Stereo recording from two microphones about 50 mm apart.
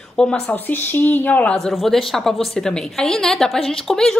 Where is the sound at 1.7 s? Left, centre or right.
Centre.